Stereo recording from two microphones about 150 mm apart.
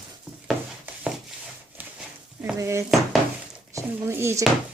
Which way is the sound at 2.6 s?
20° right (ahead or behind).